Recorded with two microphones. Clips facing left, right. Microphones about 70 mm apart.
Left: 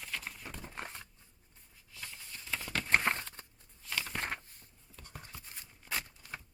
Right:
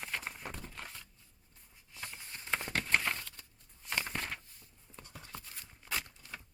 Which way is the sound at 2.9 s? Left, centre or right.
Left.